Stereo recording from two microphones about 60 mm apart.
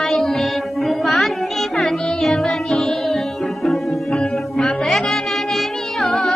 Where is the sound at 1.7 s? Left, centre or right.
Centre.